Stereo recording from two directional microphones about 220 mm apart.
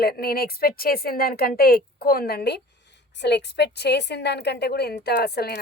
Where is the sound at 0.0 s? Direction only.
45° left (ahead or behind).